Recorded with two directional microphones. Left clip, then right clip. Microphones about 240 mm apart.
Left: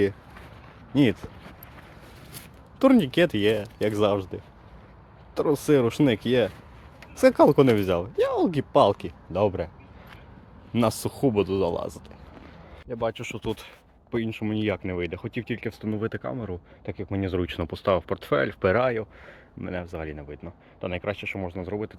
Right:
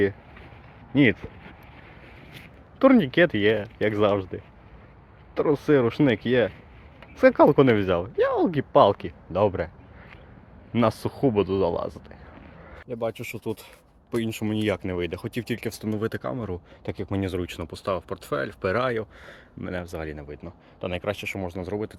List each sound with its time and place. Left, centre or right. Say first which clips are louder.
0.9 s speech: right 2 dB; centre
2.7 s speech: right 2 dB; centre
10.7 s speech: right 1 dB; centre
12.9 s speech: left 1 dB; centre
17.3 s speech: left 3 dB; centre
18.8 s speech: left 1 dB; centre